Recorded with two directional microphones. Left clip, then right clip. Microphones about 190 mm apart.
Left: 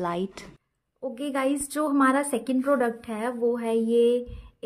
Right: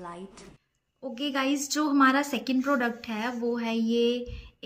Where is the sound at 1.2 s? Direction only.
60° left (ahead or behind).